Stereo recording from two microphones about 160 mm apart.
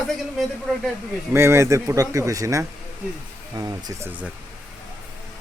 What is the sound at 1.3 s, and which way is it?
Speech, 15° right (ahead or behind).